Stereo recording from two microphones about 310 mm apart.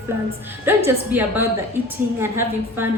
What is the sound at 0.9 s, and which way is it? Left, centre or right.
A woman's voice, centre.